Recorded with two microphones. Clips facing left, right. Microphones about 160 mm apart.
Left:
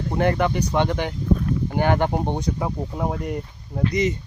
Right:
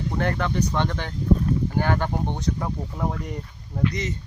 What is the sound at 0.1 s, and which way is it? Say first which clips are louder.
Speech: left 5 dB; 15° left (ahead or behind).